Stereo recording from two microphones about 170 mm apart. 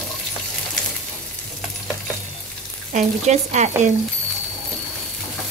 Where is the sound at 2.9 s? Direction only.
40° right (ahead or behind).